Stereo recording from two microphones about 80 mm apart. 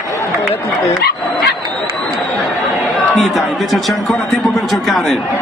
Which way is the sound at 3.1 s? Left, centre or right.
Centre.